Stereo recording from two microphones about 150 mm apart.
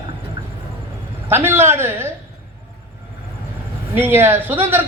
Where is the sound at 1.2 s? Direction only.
15° right (ahead or behind).